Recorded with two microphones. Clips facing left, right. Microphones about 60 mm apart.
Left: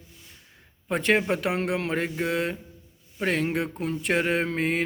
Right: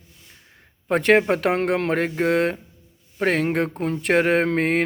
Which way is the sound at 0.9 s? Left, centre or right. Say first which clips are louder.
Right 6 dB; right.